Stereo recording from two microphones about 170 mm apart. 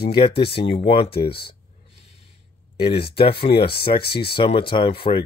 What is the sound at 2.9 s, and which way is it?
Speech, 35° left (ahead or behind).